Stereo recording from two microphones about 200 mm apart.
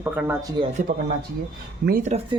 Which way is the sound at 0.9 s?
55° right (ahead or behind).